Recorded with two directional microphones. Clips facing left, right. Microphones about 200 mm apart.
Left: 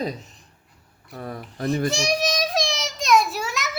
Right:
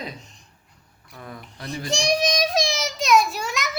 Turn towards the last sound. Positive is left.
turn(degrees=5)  # may be behind; listen again after turning